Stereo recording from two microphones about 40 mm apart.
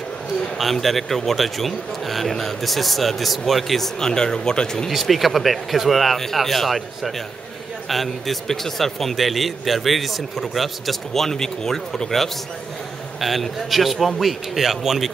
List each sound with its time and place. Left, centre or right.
0.6 s a man's voice: centre
4.1 s speech: centre
4.8 s a man's voice: centre